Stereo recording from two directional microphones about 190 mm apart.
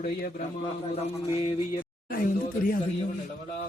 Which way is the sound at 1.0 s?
35° left (ahead or behind).